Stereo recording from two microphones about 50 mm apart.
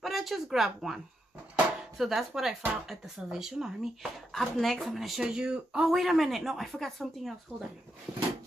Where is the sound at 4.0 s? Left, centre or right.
Centre.